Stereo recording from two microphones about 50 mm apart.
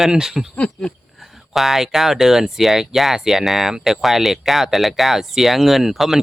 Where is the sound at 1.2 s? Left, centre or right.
Centre.